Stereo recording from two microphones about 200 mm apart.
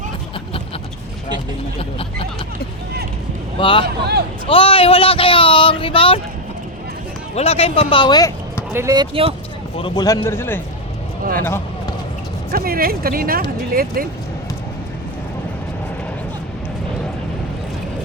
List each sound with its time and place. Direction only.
1.8 s speech: 30° left (ahead or behind)
3.6 s speech: 25° left (ahead or behind)
3.8 s a man's voice: 55° right (ahead or behind)
4.4 s speech: 25° left (ahead or behind)
7.3 s speech: 30° left (ahead or behind)
8.7 s speech: 15° right (ahead or behind)
9.7 s a man's voice: 20° left (ahead or behind)
12.5 s speech: 45° right (ahead or behind)